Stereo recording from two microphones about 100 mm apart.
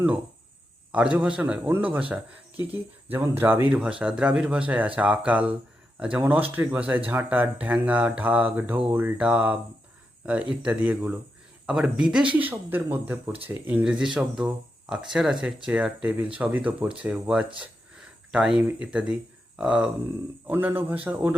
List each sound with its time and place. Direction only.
0.9 s speech: 15° right (ahead or behind)
3.8 s speech: 10° right (ahead or behind)
12.4 s speech: 20° right (ahead or behind)
13.8 s speech: 5° right (ahead or behind)
20.5 s speech: 20° right (ahead or behind)